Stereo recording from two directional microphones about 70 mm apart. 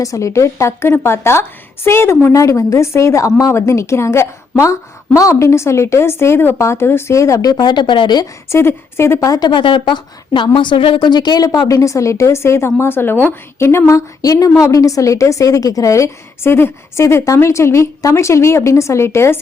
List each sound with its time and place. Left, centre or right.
0.0 s a woman's voice: left
2.3 s a woman's voice: left
3.5 s a woman's voice: left
8.4 s a woman's voice: left
9.4 s speech: left
11.8 s a woman's voice: left
14.2 s a woman's voice: left